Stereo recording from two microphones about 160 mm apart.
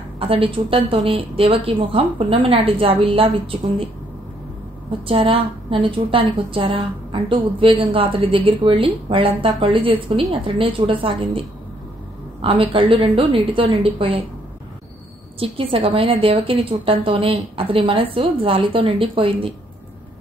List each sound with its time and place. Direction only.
0.2 s a woman's voice: 35° right (ahead or behind)
5.0 s a woman's voice: 35° right (ahead or behind)
12.4 s a woman's voice: 35° right (ahead or behind)
15.3 s a woman's voice: 35° right (ahead or behind)